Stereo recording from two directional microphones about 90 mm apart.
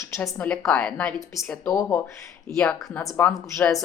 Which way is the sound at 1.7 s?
35° left (ahead or behind).